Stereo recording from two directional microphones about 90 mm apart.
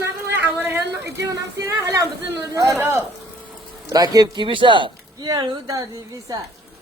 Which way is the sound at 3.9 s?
45° right (ahead or behind).